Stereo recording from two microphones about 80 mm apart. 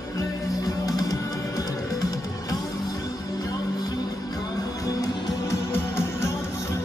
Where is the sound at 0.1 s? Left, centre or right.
Left.